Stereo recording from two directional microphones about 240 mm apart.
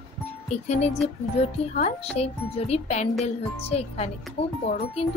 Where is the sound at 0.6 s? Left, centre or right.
Left.